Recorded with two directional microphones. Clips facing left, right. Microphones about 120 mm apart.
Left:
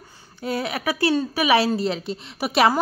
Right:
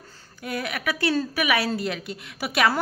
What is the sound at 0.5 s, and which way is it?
A woman's voice, 30° left (ahead or behind).